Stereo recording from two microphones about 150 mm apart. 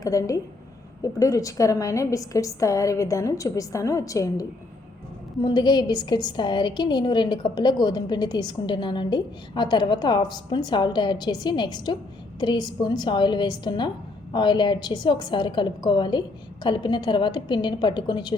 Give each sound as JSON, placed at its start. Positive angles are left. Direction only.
{"t": 0.0, "sound": "a woman's voice", "side_deg": 20}